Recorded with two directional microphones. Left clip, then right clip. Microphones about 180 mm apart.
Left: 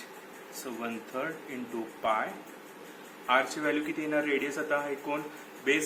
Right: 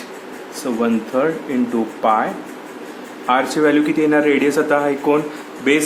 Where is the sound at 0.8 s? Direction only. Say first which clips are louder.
Right 18 dB; 40° right (ahead or behind).